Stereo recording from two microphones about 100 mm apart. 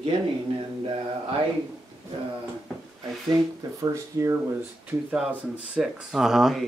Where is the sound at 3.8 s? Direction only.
35° right (ahead or behind).